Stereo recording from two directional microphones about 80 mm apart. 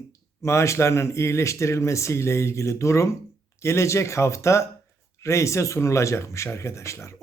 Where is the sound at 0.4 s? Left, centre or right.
Left.